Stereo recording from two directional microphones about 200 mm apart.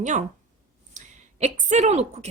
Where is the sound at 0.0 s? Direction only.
40° right (ahead or behind).